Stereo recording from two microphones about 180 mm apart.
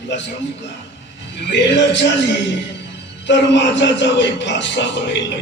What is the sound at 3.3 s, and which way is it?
A man's voice, 80° left.